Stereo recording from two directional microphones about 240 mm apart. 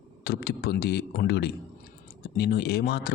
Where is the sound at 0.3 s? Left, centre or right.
Left.